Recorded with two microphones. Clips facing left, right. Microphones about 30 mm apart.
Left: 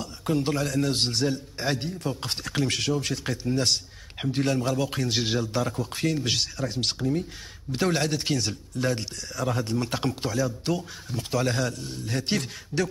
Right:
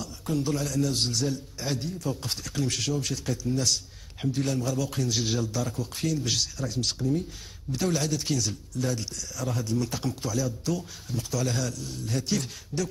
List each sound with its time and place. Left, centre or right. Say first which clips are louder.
0.0 s a man's voice: left 3 dB; left